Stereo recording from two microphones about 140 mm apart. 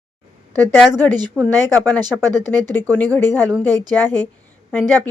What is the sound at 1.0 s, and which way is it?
Speech, 30° right (ahead or behind).